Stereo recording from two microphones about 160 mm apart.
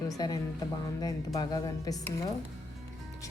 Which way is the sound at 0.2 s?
25° left (ahead or behind).